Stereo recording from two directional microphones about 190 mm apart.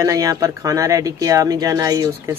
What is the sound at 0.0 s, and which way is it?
Speech, 20° right (ahead or behind).